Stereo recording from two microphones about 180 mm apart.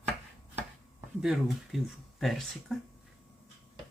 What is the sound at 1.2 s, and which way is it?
Speech, centre (ahead or behind).